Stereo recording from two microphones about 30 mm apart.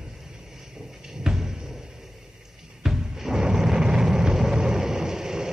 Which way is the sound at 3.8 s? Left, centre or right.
Right.